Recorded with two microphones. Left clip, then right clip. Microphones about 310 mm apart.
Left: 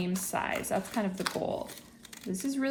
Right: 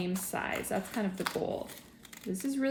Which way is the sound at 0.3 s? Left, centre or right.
Centre.